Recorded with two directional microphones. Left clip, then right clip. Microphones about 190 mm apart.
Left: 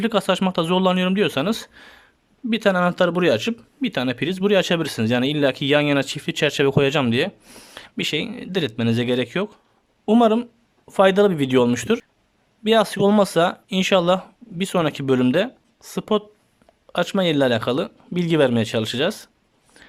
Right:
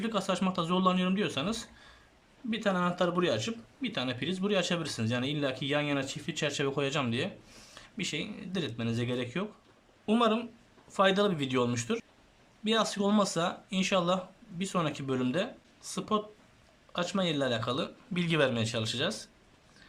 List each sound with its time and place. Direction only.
0.0 s speech: 50° left (ahead or behind)
10.1 s speech: 35° left (ahead or behind)